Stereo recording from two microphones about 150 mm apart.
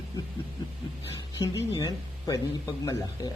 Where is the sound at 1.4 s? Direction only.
25° left (ahead or behind).